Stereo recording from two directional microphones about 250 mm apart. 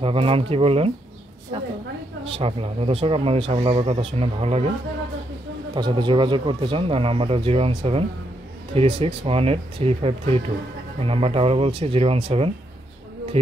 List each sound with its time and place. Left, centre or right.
0.0 s speech: right
2.2 s speech: right
5.8 s speech: centre